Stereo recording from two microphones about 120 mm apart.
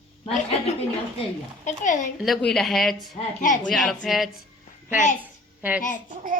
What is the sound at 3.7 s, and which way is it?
Speech, 5° left (ahead or behind).